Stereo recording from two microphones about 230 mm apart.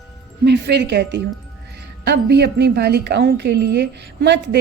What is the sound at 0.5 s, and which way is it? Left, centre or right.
Speech, right.